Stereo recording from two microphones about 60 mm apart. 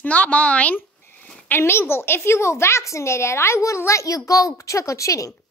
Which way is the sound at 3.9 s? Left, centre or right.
Left.